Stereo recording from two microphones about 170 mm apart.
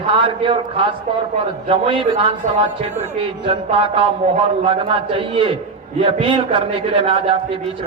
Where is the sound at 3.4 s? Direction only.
30° right (ahead or behind).